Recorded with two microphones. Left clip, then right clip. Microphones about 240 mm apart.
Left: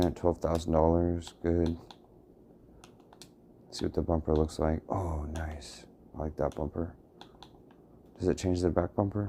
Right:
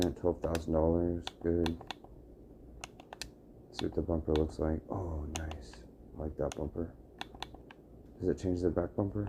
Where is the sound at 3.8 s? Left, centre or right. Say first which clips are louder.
Left 3 dB; left.